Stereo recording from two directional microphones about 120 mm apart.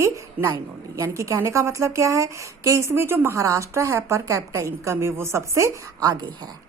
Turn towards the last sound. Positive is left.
turn(degrees=-35)  # may be behind; listen again after turning